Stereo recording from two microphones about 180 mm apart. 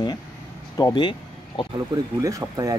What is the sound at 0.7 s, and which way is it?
Speech, 25° left (ahead or behind).